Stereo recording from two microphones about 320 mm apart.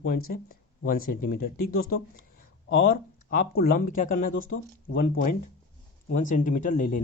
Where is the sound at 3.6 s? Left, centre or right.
Left.